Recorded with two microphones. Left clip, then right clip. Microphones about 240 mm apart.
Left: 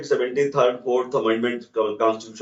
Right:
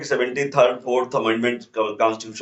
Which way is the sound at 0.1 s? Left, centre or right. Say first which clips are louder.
Left 1 dB; right.